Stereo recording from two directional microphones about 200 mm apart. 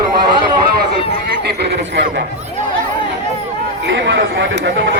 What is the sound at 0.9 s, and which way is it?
Speech, 30° left (ahead or behind).